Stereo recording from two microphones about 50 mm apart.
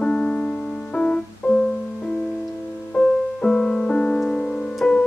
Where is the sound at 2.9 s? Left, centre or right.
Centre.